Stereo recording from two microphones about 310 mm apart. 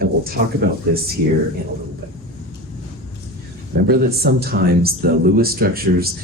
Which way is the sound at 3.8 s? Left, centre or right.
Right.